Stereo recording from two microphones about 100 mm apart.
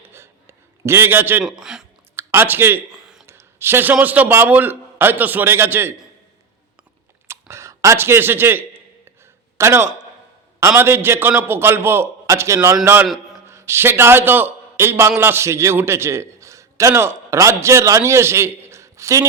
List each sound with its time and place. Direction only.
0.0 s a sound: 25° right (ahead or behind)
1.5 s speech: 5° right (ahead or behind)
2.1 s speech: 25° right (ahead or behind)
3.2 s a sound: 25° right (ahead or behind)
4.0 s a man's voice: 15° right (ahead or behind)
7.3 s a man's voice: 25° right (ahead or behind)